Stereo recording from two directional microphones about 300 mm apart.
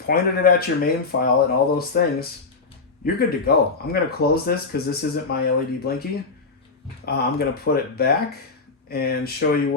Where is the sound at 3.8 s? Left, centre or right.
Left.